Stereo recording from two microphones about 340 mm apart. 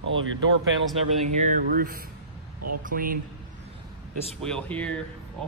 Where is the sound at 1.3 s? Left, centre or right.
Right.